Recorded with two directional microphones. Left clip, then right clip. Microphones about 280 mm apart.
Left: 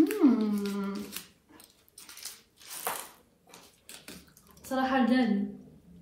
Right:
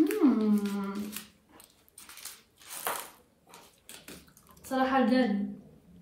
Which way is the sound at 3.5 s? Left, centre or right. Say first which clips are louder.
Even; centre.